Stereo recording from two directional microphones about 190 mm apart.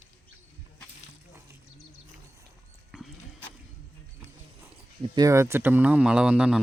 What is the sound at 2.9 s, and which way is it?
Horse, 5° right (ahead or behind).